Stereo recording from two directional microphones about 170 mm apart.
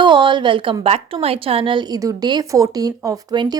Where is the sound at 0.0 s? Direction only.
30° right (ahead or behind).